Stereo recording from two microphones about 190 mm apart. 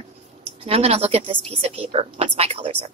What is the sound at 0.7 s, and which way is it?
A woman's voice, 35° right (ahead or behind).